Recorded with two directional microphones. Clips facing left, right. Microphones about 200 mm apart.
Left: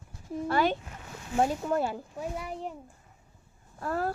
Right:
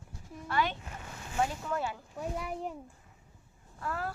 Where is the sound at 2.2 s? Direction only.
Centre (ahead or behind).